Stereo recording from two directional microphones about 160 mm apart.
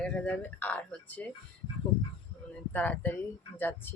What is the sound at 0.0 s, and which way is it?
Speech, 5° left (ahead or behind).